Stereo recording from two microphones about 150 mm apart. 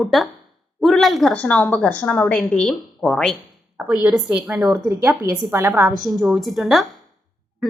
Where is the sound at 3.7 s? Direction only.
5° right (ahead or behind).